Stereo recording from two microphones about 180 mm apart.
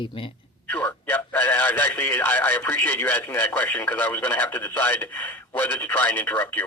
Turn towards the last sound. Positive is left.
turn(degrees=10)  # may be behind; listen again after turning